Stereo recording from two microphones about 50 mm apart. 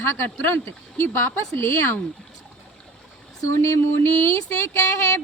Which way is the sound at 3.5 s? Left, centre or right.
Left.